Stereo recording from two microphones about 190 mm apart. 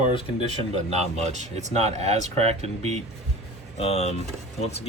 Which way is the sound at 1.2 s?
35° right (ahead or behind).